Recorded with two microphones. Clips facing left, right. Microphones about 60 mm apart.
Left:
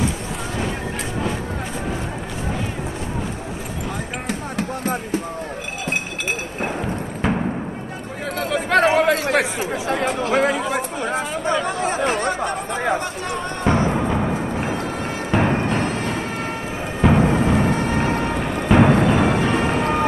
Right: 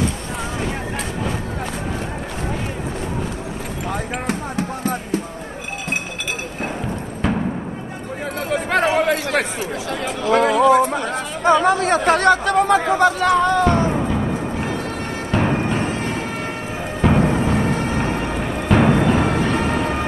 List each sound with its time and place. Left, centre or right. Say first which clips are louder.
7.2 s music: right 1 dB; centre
8.5 s a sound: left 2 dB; centre
9.3 s chatter: left 1 dB; centre
9.8 s chatter: left 2 dB; left
10.3 s chatter: right 7 dB; centre
10.8 s a sound: right 7 dB; right
11.6 s chatter: right 5 dB; right
13.0 s a sound: right 11 dB; right
13.7 s music: right 1 dB; centre